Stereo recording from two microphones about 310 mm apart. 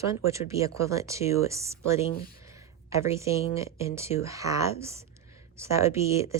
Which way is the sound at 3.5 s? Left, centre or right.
Centre.